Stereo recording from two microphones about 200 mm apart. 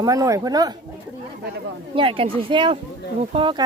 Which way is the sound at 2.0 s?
25° right (ahead or behind).